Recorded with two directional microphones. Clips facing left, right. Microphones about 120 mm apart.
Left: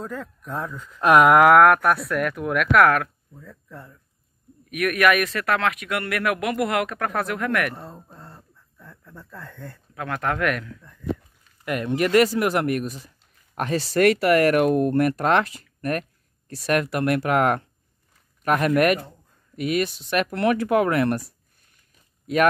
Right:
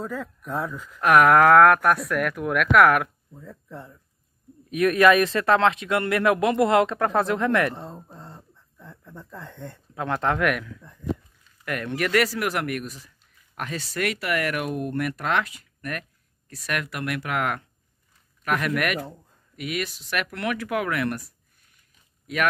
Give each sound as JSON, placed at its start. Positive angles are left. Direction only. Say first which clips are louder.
{"t": 0.0, "sound": "speech", "louder": "right 1 dB", "side_deg": 0}
{"t": 1.0, "sound": "speech", "louder": "left 2 dB", "side_deg": 20}
{"t": 2.9, "sound": "speech", "louder": "even", "side_deg": -15}
{"t": 10.4, "sound": "speech", "louder": "even", "side_deg": -5}
{"t": 11.6, "sound": "speech", "louder": "left 4 dB", "side_deg": 20}